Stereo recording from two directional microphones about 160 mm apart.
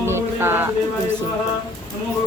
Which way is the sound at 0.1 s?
15° right (ahead or behind).